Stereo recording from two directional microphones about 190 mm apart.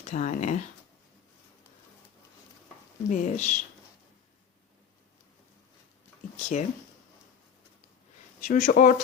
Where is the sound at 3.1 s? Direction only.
40° left (ahead or behind).